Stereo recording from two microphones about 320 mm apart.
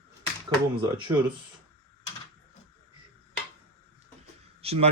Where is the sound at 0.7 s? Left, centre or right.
Centre.